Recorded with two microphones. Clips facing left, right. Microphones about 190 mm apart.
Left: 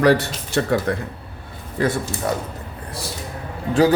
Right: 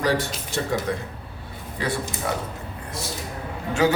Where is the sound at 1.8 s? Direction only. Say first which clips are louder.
Left 6 dB; 50° left (ahead or behind).